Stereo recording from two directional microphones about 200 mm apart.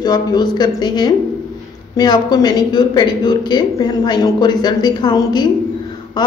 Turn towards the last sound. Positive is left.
turn(degrees=20)  # may be behind; listen again after turning